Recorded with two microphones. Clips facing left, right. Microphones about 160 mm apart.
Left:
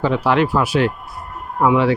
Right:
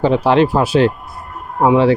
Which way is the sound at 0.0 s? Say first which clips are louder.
Right 4 dB; 25° right (ahead or behind).